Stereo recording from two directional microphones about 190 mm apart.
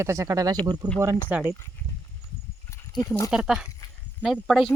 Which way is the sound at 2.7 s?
15° left (ahead or behind).